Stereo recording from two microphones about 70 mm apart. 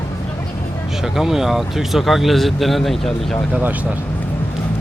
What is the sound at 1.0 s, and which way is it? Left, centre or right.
Speech, centre.